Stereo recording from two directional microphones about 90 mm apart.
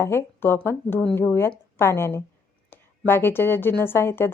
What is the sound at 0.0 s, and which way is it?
A woman's voice, 30° left (ahead or behind).